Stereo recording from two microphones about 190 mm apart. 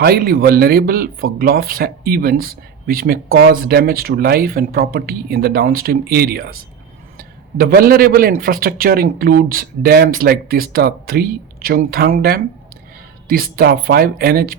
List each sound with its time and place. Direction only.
0.0 s speech: 55° right (ahead or behind)